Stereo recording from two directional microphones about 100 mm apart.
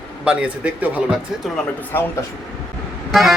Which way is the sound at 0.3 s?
10° right (ahead or behind).